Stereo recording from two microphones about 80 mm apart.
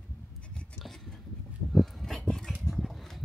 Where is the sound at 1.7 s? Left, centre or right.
Centre.